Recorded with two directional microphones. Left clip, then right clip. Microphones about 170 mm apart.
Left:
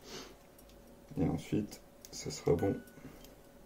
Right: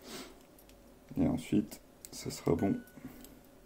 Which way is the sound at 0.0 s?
60° right (ahead or behind).